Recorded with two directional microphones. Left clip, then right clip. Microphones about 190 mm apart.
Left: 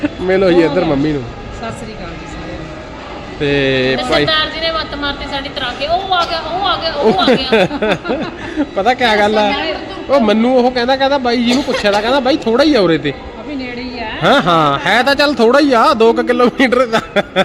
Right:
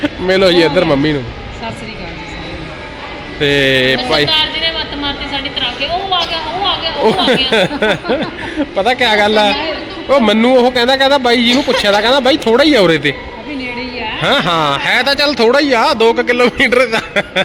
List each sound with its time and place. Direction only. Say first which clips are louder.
0.0 s speech: right 2 dB; centre (ahead or behind)
3.4 s speech: right 3 dB; 5° right (ahead or behind)
4.3 s a woman's voice: right 1 dB; 20° left (ahead or behind)
7.5 s speech: even; centre (ahead or behind)
8.5 s a woman's voice: even; 15° left (ahead or behind)
10.1 s a man's voice: right 2 dB; 10° right (ahead or behind)
14.0 s speech: left 2 dB; 15° left (ahead or behind)